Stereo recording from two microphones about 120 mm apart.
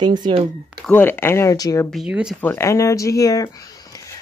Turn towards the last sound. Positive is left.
turn(degrees=30)  # may be behind; listen again after turning